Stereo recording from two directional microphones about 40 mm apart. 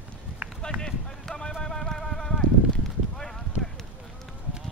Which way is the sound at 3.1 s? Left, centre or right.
Centre.